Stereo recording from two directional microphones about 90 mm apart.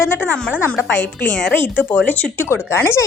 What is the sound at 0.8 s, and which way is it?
Speech, 20° left (ahead or behind).